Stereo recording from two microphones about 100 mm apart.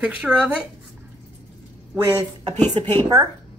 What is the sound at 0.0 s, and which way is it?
Speech, 10° right (ahead or behind).